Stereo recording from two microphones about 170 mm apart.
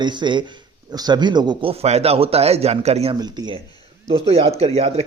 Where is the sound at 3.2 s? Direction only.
25° right (ahead or behind).